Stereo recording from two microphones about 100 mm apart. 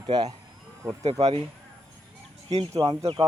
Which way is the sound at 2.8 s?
55° right (ahead or behind).